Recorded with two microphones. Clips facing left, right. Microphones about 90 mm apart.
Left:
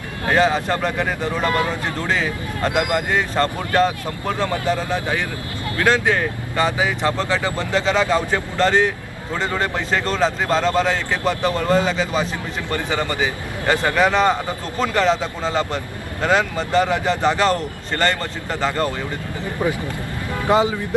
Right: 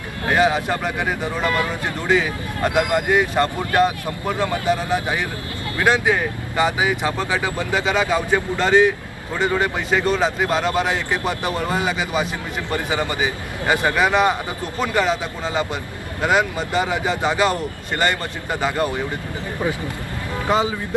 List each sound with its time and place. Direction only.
0.3 s speech: 10° right (ahead or behind)
1.5 s speech: 25° left (ahead or behind)
2.0 s speech: 10° right (ahead or behind)
19.6 s speech: 20° left (ahead or behind)